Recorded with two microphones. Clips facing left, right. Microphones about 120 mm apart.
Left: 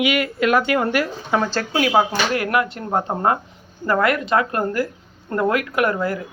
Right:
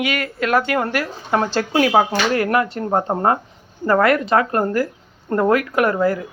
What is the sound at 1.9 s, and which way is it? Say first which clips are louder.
A woman's voice: right 2 dB; 30° right (ahead or behind).